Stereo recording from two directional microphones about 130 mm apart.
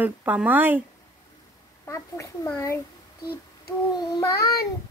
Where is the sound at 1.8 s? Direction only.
20° left (ahead or behind).